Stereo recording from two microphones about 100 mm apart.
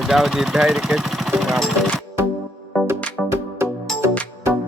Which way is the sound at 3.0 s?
15° left (ahead or behind).